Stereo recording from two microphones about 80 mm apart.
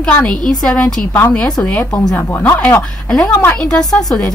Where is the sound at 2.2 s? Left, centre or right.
Left.